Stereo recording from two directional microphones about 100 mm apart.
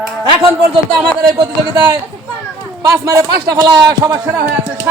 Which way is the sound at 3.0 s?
30° right (ahead or behind).